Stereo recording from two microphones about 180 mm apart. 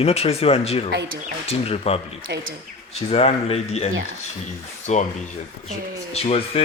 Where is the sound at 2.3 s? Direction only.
65° right (ahead or behind).